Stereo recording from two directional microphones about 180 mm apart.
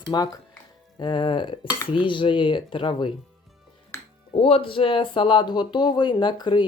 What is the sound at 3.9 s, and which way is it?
Music, 15° left (ahead or behind).